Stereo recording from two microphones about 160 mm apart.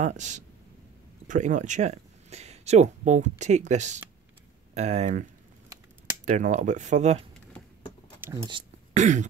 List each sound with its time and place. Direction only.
0.0 s speech: 50° right (ahead or behind)
6.2 s speech: 50° right (ahead or behind)
8.2 s a sound: 15° right (ahead or behind)
8.9 s speech: 50° right (ahead or behind)